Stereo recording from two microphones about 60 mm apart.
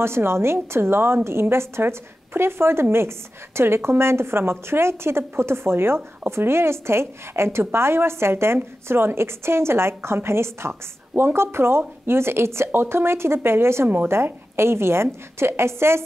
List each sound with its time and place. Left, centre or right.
0.0 s speech: right